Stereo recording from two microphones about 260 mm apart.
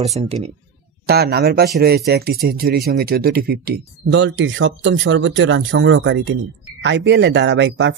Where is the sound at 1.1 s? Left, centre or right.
Right.